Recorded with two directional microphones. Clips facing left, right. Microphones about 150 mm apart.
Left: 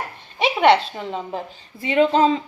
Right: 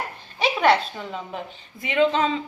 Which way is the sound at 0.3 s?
25° left (ahead or behind).